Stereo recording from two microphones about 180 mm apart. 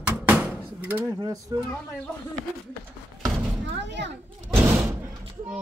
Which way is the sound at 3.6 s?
75° right (ahead or behind).